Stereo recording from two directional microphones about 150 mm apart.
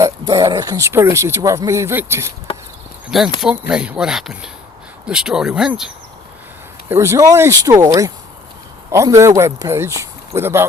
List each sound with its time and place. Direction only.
0.0 s speech: 30° right (ahead or behind)
3.1 s speech: centre (ahead or behind)
6.8 s speech: 15° right (ahead or behind)